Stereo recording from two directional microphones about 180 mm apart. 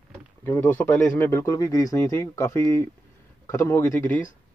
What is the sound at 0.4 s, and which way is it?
Speech, 10° left (ahead or behind).